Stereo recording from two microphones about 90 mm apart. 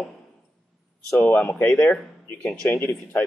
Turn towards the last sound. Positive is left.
turn(degrees=30)  # may be behind; listen again after turning